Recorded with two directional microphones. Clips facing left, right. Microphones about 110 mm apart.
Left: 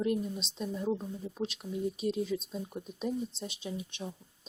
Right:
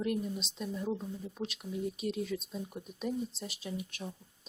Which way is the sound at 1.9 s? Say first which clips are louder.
Left 3 dB; 30° left (ahead or behind).